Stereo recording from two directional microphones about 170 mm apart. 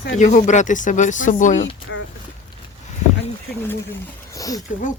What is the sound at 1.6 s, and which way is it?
Speech, 90° left.